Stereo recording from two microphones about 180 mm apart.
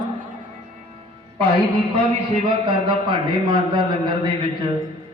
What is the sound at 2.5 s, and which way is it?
A man's voice, 25° right (ahead or behind).